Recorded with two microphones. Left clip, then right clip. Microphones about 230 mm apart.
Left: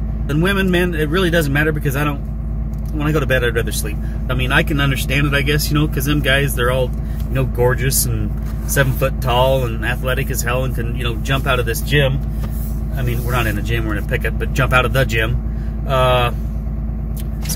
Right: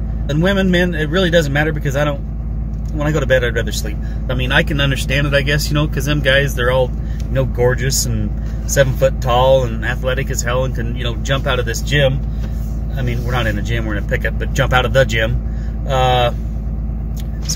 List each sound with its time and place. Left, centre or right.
0.3 s speech: centre